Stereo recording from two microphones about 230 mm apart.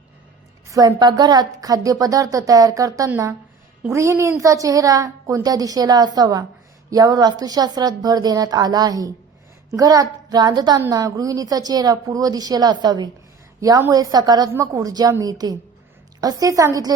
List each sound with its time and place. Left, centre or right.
0.7 s a woman's voice: centre